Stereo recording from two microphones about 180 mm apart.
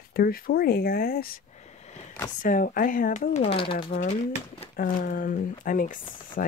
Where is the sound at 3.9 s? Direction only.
45° left (ahead or behind).